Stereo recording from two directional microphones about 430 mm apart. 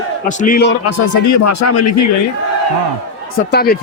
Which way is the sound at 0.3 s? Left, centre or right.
Centre.